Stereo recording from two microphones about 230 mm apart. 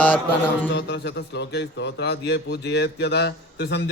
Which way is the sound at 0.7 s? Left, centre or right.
Left.